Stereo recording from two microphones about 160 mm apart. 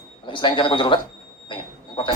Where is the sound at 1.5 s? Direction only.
30° left (ahead or behind).